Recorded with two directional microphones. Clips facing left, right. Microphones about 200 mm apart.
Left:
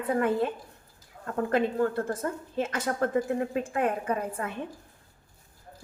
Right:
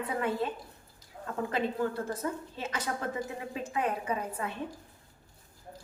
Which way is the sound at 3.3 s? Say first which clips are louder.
Left 9 dB; 55° left (ahead or behind).